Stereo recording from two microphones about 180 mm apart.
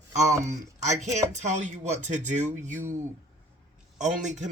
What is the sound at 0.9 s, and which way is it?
Speech, 40° right (ahead or behind).